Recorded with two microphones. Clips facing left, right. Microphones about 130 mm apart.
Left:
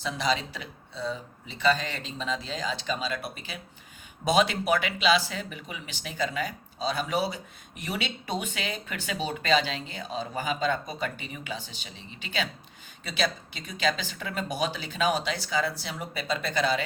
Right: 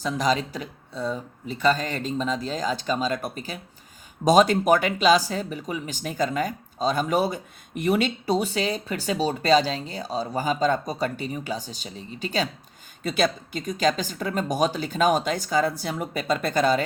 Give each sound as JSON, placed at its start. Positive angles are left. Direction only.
{"t": 0.0, "sound": "speech", "side_deg": -45}